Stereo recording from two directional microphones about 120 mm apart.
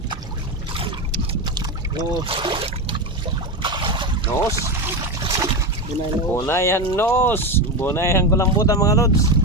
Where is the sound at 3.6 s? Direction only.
40° right (ahead or behind).